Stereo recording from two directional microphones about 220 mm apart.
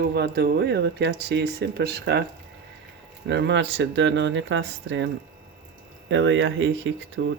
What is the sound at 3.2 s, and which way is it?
Speech, 50° right (ahead or behind).